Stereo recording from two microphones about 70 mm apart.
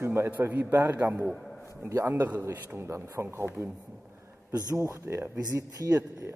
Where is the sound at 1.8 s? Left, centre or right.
Right.